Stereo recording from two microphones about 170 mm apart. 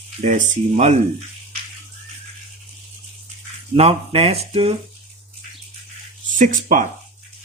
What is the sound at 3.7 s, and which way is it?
Speech, 35° right (ahead or behind).